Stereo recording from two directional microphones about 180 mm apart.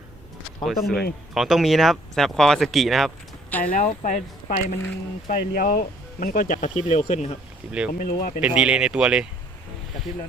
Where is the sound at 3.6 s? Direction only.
50° left (ahead or behind).